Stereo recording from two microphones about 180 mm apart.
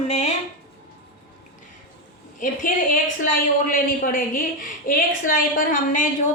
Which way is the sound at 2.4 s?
50° left (ahead or behind).